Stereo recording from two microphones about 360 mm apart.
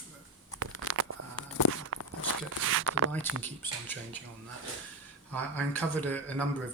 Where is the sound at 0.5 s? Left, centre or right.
Right.